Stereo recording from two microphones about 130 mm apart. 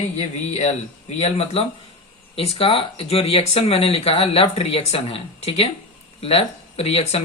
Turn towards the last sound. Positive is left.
turn(degrees=50)  # may be behind; listen again after turning